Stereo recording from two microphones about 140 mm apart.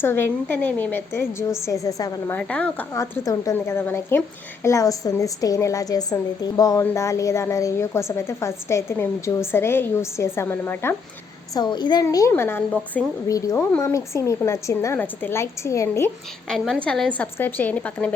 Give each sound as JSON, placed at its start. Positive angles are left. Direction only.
{"t": 0.0, "sound": "a woman's voice", "side_deg": 15}
{"t": 2.3, "sound": "a woman's voice", "side_deg": 10}
{"t": 2.9, "sound": "a woman's voice", "side_deg": 25}
{"t": 11.5, "sound": "a woman's voice", "side_deg": 30}
{"t": 12.3, "sound": "a woman's voice", "side_deg": 15}
{"t": 13.2, "sound": "a woman's voice", "side_deg": 25}
{"t": 16.5, "sound": "a woman's voice", "side_deg": 0}